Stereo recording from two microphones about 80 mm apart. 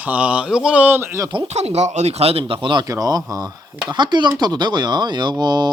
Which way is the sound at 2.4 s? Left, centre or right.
Right.